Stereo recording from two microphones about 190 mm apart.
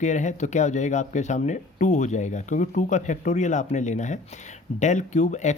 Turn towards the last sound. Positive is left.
turn(degrees=40)  # may be behind; listen again after turning